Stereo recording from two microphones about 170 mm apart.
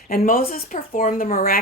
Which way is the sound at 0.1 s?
55° left (ahead or behind).